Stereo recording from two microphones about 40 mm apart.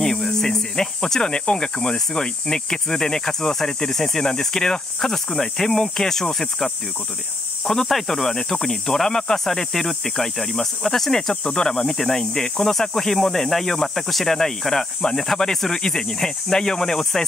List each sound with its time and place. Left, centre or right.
0.0 s speech: centre